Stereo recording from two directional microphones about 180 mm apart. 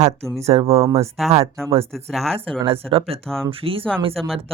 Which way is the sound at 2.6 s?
30° right (ahead or behind).